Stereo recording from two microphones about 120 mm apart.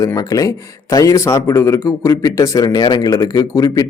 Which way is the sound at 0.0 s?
30° left (ahead or behind).